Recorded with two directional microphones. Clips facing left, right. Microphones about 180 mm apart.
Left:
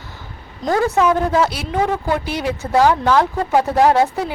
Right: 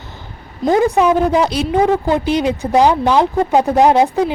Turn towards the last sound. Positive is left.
turn(degrees=-20)  # may be behind; listen again after turning